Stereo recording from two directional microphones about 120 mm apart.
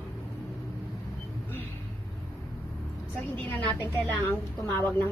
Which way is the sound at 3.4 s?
15° left (ahead or behind).